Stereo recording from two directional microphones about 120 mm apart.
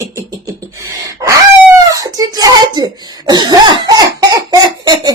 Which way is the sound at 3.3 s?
35° right (ahead or behind).